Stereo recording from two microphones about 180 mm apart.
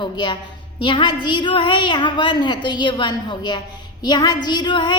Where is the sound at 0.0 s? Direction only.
25° left (ahead or behind).